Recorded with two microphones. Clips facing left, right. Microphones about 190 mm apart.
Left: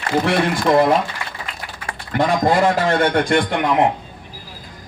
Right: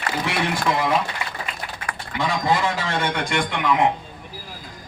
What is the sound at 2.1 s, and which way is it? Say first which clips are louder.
A man's voice: left 6 dB; 55° left (ahead or behind).